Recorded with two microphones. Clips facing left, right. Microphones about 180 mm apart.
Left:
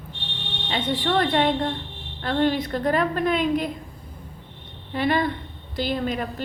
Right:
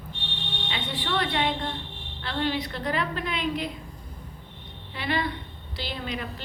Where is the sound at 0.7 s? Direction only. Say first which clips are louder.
Left 7 dB; 40° left (ahead or behind).